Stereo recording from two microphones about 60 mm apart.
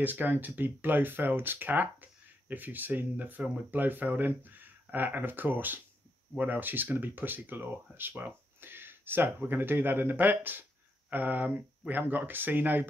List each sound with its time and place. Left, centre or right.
0.0 s speech: right